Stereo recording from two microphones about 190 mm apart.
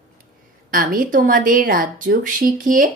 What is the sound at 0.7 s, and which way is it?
Speech, 45° right (ahead or behind).